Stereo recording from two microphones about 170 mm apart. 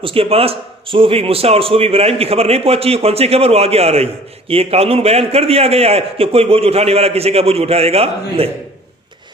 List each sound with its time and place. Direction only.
0.0 s a man's voice: 35° right (ahead or behind)